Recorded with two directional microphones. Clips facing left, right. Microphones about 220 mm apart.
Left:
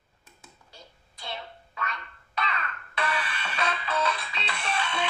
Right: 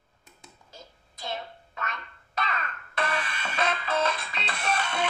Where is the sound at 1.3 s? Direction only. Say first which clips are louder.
Right 2 dB; 45° right (ahead or behind).